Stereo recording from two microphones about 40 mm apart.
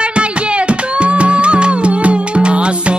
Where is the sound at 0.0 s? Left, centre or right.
Right.